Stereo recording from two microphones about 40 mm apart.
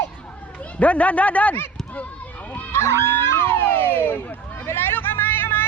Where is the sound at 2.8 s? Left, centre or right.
Left.